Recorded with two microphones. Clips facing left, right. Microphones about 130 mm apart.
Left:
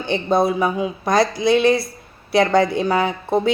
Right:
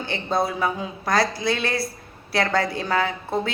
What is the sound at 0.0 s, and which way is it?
Speech, 20° left (ahead or behind).